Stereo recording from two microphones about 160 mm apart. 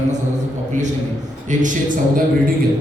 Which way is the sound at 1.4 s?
55° right (ahead or behind).